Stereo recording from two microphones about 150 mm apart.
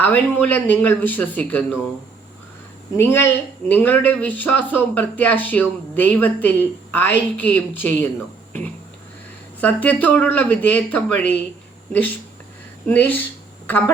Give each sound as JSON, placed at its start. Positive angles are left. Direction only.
{"t": 0.0, "sound": "speech", "side_deg": 10}
{"t": 2.9, "sound": "speech", "side_deg": 15}
{"t": 9.6, "sound": "speech", "side_deg": 10}
{"t": 12.9, "sound": "speech", "side_deg": 10}